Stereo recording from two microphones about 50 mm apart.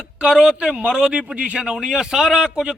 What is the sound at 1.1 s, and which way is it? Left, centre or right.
A man's voice, right.